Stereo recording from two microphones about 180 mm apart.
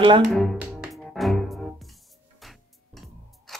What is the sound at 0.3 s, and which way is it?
Music, centre (ahead or behind).